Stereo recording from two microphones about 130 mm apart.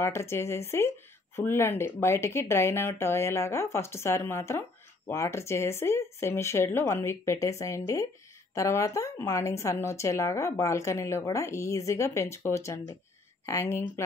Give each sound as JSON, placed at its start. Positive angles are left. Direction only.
{"t": 0.0, "sound": "speech", "side_deg": 20}